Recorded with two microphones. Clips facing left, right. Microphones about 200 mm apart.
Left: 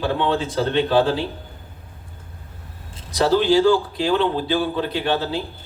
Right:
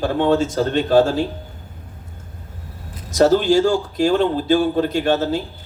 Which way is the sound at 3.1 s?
45° right (ahead or behind).